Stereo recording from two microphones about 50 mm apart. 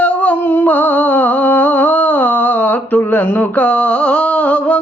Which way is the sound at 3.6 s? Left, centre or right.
Left.